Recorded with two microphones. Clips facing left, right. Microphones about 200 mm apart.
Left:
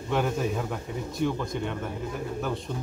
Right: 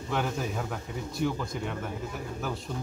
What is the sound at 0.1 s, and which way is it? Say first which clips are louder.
A man's voice: left 4 dB; centre (ahead or behind).